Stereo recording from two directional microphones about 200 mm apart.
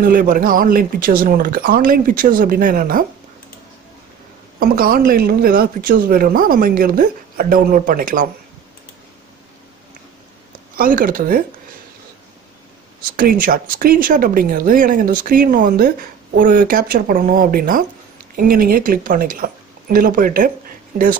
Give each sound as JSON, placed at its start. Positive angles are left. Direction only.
{"t": 0.0, "sound": "speech", "side_deg": -45}
{"t": 4.6, "sound": "speech", "side_deg": -45}
{"t": 10.8, "sound": "speech", "side_deg": -45}
{"t": 13.1, "sound": "speech", "side_deg": -45}